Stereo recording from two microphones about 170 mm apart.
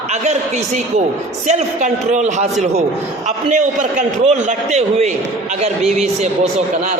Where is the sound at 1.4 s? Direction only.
45° right (ahead or behind).